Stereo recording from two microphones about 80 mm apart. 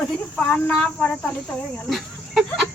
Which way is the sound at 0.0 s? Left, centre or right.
Centre.